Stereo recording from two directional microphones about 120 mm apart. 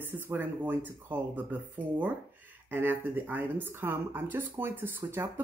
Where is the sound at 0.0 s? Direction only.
15° right (ahead or behind).